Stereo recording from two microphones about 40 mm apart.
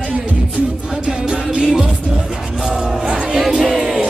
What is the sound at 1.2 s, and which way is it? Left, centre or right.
Music, right.